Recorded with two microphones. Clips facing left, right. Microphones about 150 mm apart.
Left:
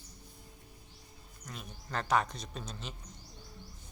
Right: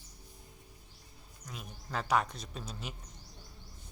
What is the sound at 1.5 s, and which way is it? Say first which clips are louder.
Speech: even; 5° right (ahead or behind).